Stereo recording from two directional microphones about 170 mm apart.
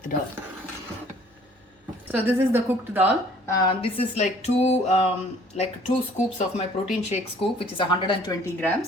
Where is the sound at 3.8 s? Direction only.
40° left (ahead or behind).